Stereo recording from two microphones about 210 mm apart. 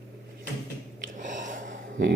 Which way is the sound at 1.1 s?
35° right (ahead or behind).